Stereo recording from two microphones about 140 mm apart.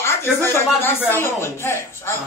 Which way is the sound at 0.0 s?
20° left (ahead or behind).